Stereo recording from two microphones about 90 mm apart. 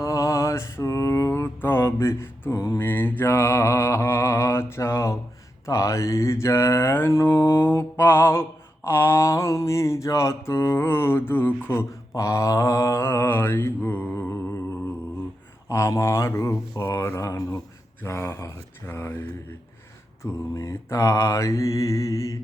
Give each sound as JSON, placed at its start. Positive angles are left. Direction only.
{"t": 0.0, "sound": "mantra", "side_deg": 40}
{"t": 2.8, "sound": "mantra", "side_deg": 20}
{"t": 15.7, "sound": "speech", "side_deg": 30}
{"t": 20.6, "sound": "speech", "side_deg": 35}